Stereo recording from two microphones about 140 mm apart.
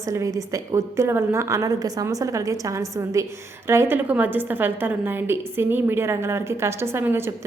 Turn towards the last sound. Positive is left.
turn(degrees=-15)  # may be behind; listen again after turning